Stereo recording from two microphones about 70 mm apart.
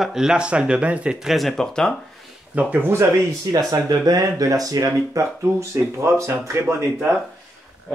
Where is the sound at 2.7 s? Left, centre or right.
Right.